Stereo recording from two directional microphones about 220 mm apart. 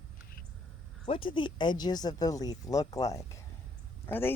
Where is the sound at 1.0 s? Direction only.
25° left (ahead or behind).